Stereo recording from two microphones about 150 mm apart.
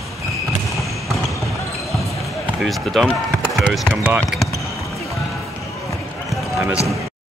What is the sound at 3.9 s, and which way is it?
Speech, 15° right (ahead or behind).